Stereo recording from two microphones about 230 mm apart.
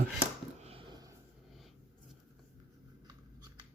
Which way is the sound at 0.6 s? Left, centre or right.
Right.